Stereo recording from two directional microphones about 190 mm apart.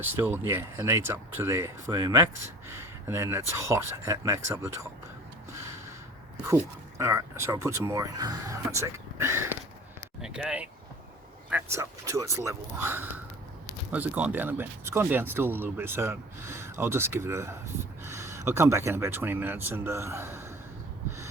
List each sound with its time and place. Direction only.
0.0 s speech: 10° right (ahead or behind)
7.0 s speech: 15° right (ahead or behind)
10.2 s speech: 5° right (ahead or behind)